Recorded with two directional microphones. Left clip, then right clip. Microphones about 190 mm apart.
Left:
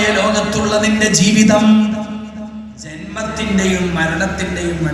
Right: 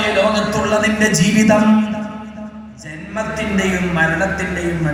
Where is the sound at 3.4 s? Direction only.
20° left (ahead or behind).